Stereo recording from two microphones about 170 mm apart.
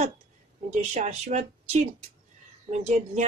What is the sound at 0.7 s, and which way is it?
A woman's voice, 40° right (ahead or behind).